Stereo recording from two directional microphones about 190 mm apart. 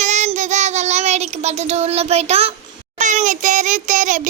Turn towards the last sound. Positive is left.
turn(degrees=-40)  # may be behind; listen again after turning